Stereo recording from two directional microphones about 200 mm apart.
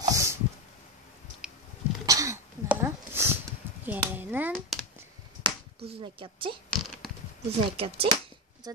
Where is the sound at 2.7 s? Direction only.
10° right (ahead or behind).